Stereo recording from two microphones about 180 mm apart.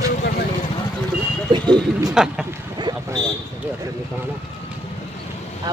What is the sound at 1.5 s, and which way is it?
Speech, 25° right (ahead or behind).